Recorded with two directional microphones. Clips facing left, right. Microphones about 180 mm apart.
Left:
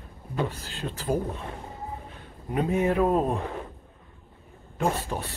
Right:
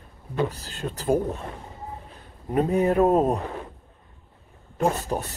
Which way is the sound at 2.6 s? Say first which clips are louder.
Right 3 dB; 35° right (ahead or behind).